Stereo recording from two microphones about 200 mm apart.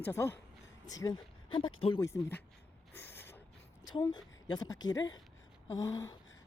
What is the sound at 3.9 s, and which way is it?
A woman's voice, 20° left (ahead or behind).